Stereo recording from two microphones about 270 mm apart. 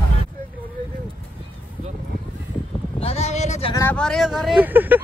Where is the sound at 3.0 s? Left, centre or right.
Left.